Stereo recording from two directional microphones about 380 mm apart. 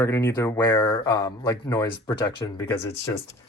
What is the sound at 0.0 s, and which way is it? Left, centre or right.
Speech, centre.